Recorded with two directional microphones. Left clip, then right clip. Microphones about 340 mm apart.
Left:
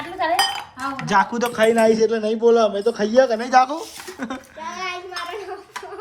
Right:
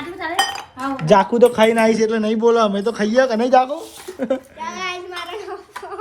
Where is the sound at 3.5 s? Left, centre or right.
Centre.